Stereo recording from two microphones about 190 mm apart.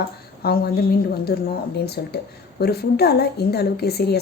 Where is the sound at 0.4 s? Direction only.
55° left (ahead or behind).